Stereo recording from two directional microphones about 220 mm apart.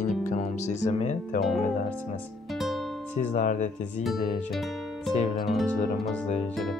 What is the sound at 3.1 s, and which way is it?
Speech, 35° left (ahead or behind).